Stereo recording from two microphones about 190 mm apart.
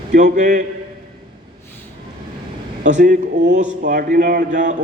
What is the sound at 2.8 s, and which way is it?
A man's voice, 40° right (ahead or behind).